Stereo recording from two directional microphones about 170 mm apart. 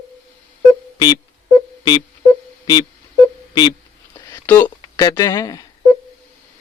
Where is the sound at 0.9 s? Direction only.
25° left (ahead or behind).